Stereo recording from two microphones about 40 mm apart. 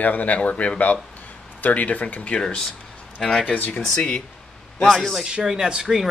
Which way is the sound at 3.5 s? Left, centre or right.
Left.